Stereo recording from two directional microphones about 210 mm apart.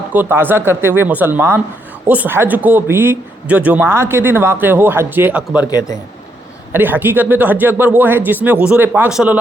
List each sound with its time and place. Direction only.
0.1 s a man's voice: 10° right (ahead or behind)
6.7 s a man's voice: 10° right (ahead or behind)